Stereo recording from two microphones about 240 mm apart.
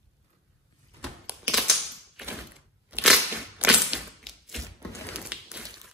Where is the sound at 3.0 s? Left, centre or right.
Centre.